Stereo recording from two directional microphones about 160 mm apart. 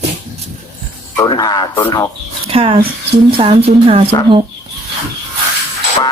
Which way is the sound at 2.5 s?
35° right (ahead or behind).